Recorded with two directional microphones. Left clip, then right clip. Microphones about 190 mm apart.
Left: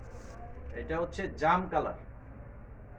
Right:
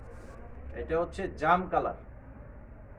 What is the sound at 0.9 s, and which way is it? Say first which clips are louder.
A man's voice: right 3 dB; 15° right (ahead or behind).